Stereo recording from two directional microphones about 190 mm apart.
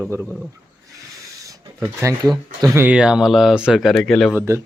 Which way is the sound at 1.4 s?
15° right (ahead or behind).